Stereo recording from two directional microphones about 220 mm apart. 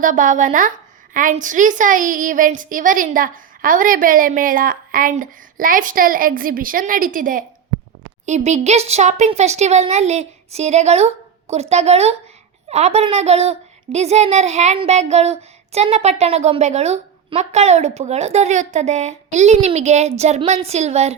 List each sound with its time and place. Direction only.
0.0 s a woman's voice: 35° right (ahead or behind)